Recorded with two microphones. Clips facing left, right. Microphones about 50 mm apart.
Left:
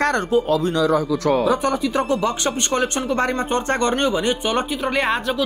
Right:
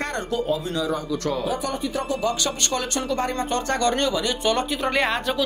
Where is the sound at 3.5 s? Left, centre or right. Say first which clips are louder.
Left 3 dB; left.